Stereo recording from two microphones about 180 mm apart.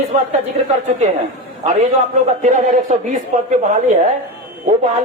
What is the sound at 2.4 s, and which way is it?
A man's voice, 45° right (ahead or behind).